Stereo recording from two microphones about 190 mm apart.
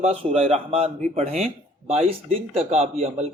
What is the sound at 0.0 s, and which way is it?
Speech, 35° right (ahead or behind).